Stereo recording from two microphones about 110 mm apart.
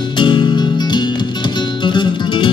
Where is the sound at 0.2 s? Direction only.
45° left (ahead or behind).